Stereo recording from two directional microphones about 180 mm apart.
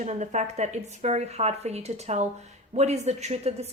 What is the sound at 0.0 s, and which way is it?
Speech, 40° right (ahead or behind).